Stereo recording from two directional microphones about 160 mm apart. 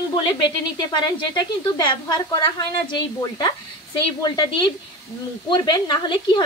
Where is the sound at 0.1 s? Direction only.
30° left (ahead or behind).